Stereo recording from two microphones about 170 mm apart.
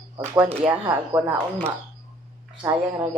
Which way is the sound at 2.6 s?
25° right (ahead or behind).